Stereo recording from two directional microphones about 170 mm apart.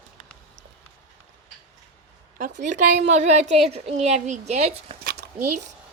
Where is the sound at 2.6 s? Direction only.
45° right (ahead or behind).